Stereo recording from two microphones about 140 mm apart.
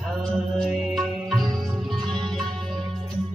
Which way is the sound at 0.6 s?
Centre (ahead or behind).